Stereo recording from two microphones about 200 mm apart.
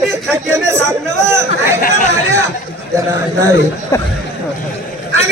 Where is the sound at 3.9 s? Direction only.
15° left (ahead or behind).